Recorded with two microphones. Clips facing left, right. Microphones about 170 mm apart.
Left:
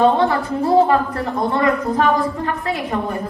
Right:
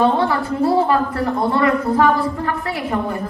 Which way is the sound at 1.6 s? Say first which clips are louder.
Right 2 dB; 20° left (ahead or behind).